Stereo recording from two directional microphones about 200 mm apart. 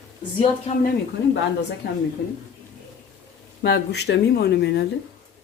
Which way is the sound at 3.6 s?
55° left (ahead or behind).